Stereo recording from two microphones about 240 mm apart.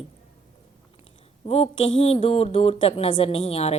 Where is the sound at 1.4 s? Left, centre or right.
Left.